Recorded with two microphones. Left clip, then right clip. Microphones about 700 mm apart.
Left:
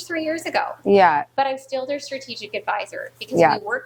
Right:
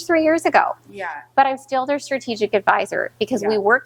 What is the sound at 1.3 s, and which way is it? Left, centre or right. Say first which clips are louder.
A woman's voice: right 5 dB; right.